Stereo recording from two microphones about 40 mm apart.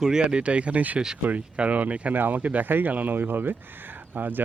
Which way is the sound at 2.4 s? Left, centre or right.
Right.